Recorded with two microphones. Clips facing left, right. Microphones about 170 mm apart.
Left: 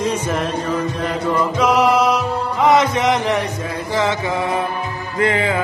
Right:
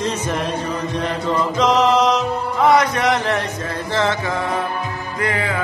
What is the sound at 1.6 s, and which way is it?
Music, 10° left (ahead or behind).